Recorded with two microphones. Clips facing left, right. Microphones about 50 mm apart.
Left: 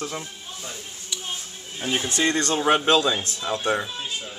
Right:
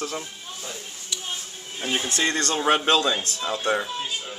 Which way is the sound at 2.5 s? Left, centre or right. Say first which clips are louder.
Left 1 dB; centre.